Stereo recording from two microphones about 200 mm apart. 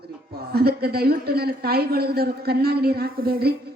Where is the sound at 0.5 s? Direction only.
50° right (ahead or behind).